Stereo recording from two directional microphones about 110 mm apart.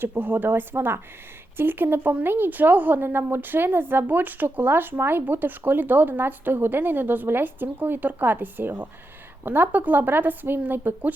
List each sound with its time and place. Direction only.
0.0 s a woman's voice: 20° right (ahead or behind)